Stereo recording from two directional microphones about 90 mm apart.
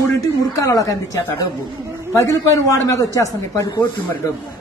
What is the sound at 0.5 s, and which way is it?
Speech, 40° left (ahead or behind).